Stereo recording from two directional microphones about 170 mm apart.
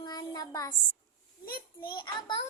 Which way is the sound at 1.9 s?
30° left (ahead or behind).